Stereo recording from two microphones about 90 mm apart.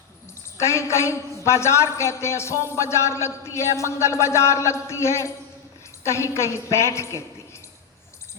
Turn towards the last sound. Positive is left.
turn(degrees=30)  # may be behind; listen again after turning